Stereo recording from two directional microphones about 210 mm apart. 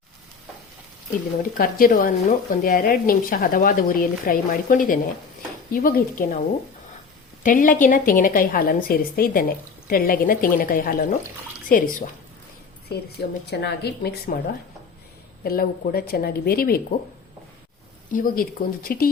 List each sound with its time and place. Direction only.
1.4 s a woman's voice: 40° left (ahead or behind)
7.4 s a woman's voice: 40° left (ahead or behind)
12.9 s a woman's voice: 50° left (ahead or behind)
15.4 s a woman's voice: 45° left (ahead or behind)
18.1 s a woman's voice: 40° left (ahead or behind)